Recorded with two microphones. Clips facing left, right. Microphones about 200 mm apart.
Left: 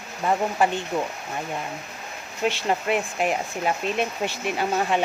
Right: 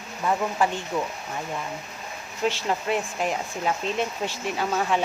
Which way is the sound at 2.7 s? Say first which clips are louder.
Left 2 dB; 15° left (ahead or behind).